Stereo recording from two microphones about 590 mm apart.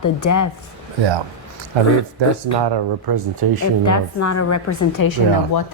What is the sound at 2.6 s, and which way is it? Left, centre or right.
Speech, right.